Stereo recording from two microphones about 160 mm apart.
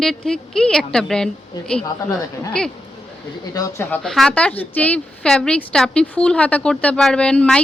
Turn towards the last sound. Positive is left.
turn(degrees=5)  # may be behind; listen again after turning